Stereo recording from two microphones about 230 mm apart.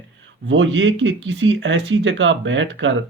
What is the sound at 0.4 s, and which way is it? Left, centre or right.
Speech, right.